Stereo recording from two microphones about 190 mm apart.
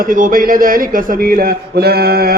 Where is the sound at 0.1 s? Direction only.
45° right (ahead or behind).